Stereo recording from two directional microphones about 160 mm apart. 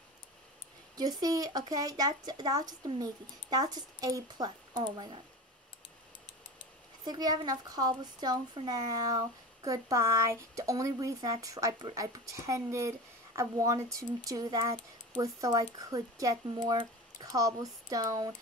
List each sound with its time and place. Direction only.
0.9 s speech: 25° right (ahead or behind)
7.1 s speech: 25° right (ahead or behind)